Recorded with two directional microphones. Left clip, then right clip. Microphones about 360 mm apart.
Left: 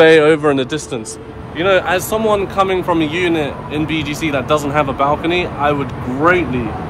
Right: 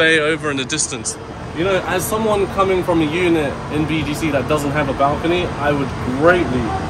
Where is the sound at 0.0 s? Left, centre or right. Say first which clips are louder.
Left 6 dB; centre.